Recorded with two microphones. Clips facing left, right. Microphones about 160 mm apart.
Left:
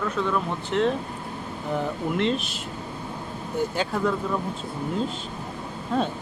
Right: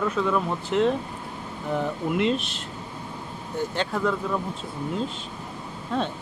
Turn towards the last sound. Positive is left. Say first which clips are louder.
# left 2 dB
turn(degrees=5)  # may be behind; listen again after turning